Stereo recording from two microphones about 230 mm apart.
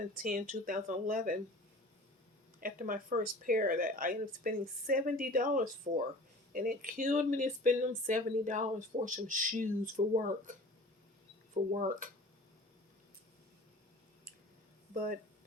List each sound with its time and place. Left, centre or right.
0.2 s speech: right
2.6 s speech: right
11.5 s speech: right
14.9 s speech: right